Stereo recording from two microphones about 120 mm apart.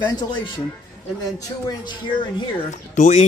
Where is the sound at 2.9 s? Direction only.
90° left.